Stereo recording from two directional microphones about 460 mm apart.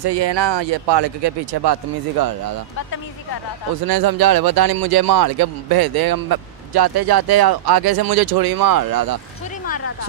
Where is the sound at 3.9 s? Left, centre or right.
Right.